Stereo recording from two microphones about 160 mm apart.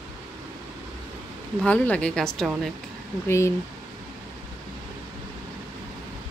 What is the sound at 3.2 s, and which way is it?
Speech, 15° left (ahead or behind).